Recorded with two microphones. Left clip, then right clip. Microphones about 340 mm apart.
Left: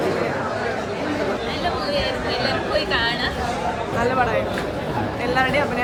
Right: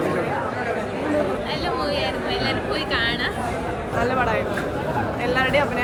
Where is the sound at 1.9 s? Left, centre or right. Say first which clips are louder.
Left 1 dB; centre.